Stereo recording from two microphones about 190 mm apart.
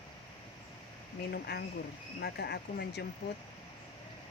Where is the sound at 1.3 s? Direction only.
55° left (ahead or behind).